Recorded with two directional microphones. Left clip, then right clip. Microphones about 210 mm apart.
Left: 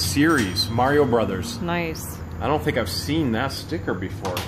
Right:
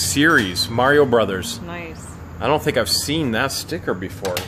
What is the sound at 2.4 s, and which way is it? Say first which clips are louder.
Speech: right 4 dB; 45° right (ahead or behind).